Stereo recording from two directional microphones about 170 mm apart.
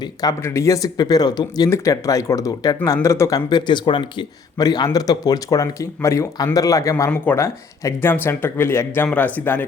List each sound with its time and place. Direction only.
0.2 s speech: 20° left (ahead or behind)